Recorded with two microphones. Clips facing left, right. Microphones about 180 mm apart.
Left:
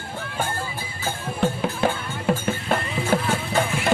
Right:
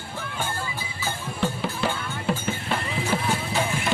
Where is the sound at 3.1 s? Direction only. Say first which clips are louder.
Left 5 dB; 55° left (ahead or behind).